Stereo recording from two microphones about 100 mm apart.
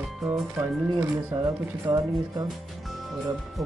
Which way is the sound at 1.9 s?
50° right (ahead or behind).